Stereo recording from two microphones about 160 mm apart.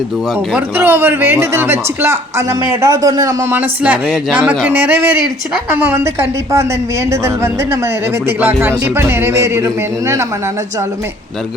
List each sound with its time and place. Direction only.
0.5 s speech: 15° right (ahead or behind)